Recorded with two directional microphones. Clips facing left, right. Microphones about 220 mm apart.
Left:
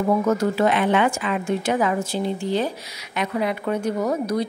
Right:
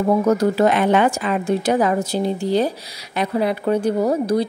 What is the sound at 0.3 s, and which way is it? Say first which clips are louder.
Speech: right 4 dB; 35° right (ahead or behind).